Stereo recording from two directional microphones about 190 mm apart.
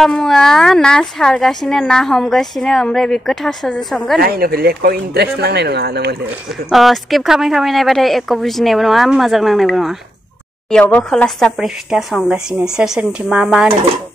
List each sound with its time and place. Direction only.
0.0 s speech: centre (ahead or behind)
4.2 s speech: 50° right (ahead or behind)
6.7 s speech: centre (ahead or behind)